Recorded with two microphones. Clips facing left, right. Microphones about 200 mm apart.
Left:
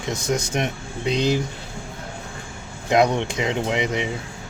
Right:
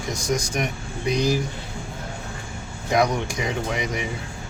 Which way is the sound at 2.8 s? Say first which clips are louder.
Left 3 dB; 25° left (ahead or behind).